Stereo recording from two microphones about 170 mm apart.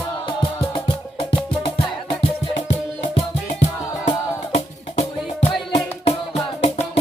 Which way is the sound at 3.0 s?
40° left (ahead or behind).